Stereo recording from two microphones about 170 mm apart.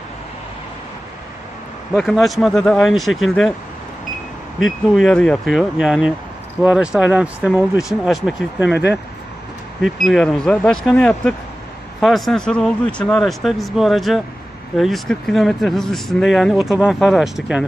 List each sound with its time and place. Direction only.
1.9 s speech: centre (ahead or behind)
4.6 s speech: centre (ahead or behind)
8.7 s speech: 85° left
9.8 s speech: centre (ahead or behind)